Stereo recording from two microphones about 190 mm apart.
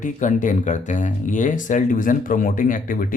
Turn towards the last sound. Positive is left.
turn(degrees=45)  # may be behind; listen again after turning